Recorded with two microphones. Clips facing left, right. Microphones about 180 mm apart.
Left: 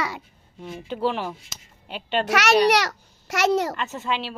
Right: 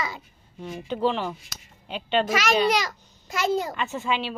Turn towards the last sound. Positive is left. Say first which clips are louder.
# right 1 dB
turn(degrees=0)  # may be behind; listen again after turning